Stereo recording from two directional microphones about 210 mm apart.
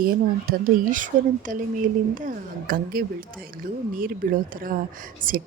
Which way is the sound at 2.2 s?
40° right (ahead or behind).